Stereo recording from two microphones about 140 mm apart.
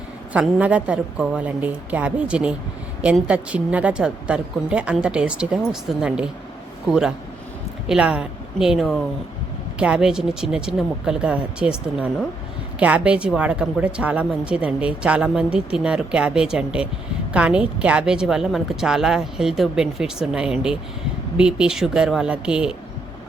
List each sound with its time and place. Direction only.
0.3 s a woman's voice: 10° right (ahead or behind)